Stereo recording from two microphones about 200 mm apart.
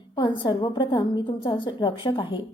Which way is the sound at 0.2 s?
25° left (ahead or behind).